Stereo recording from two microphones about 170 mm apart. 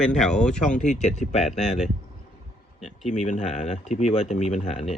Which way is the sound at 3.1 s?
40° left (ahead or behind).